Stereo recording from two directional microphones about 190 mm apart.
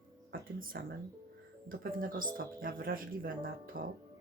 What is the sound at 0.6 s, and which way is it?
Speech, 50° right (ahead or behind).